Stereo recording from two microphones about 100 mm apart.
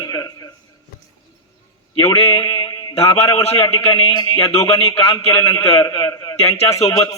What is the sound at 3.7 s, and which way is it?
A man's voice, 70° left (ahead or behind).